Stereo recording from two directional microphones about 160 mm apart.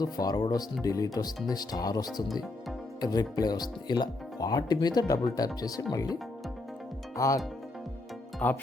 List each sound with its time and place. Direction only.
0.0 s speech: 25° left (ahead or behind)
2.2 s speech: centre (ahead or behind)
3.0 s speech: 25° left (ahead or behind)
7.2 s speech: 20° left (ahead or behind)